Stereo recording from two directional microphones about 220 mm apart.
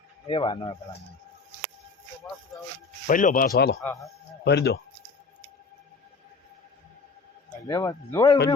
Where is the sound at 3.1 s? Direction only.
35° left (ahead or behind).